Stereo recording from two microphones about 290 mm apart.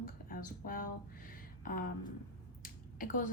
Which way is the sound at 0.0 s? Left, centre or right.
Left.